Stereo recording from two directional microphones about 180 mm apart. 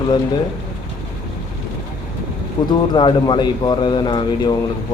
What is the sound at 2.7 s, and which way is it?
Speech, 25° left (ahead or behind).